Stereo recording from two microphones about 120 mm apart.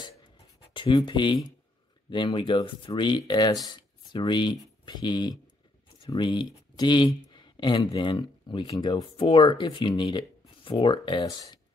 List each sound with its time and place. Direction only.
0.9 s speech: 40° left (ahead or behind)